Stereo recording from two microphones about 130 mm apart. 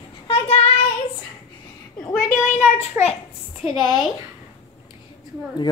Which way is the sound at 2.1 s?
75° left (ahead or behind).